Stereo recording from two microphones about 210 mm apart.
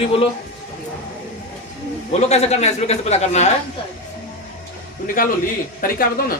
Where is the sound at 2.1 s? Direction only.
30° left (ahead or behind).